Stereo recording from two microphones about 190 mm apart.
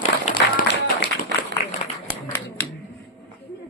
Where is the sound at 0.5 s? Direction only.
55° left (ahead or behind).